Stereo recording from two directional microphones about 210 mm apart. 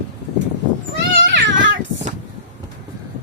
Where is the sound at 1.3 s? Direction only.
60° right (ahead or behind).